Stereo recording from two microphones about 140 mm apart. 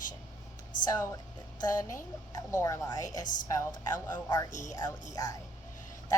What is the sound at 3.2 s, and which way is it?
Speech, 65° left (ahead or behind).